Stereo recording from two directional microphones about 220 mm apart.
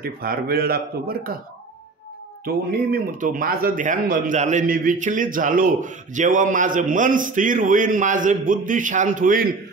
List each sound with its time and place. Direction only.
0.0 s speech: 40° right (ahead or behind)
2.4 s speech: 40° right (ahead or behind)